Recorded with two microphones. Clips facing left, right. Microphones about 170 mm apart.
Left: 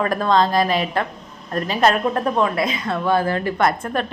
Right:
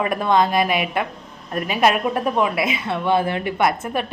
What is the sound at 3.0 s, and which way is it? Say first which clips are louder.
Speech: even; 25° right (ahead or behind).